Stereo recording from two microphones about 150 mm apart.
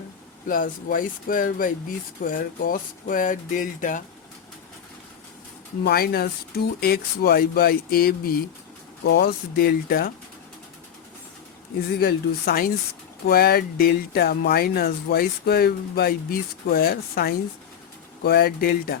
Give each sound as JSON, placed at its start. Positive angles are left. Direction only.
{"t": 0.4, "sound": "speech", "side_deg": 70}
{"t": 5.8, "sound": "speech", "side_deg": 90}
{"t": 11.9, "sound": "speech", "side_deg": 85}